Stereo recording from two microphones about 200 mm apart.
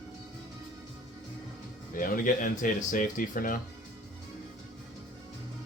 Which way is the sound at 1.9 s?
40° left (ahead or behind).